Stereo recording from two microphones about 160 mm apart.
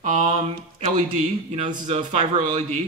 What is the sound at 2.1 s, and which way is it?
Speech, 50° right (ahead or behind).